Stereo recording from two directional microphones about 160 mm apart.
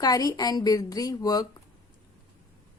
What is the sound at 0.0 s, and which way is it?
A woman's voice, 25° left (ahead or behind).